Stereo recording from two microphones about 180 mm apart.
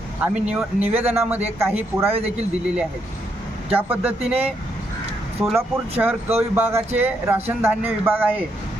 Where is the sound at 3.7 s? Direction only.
10° right (ahead or behind).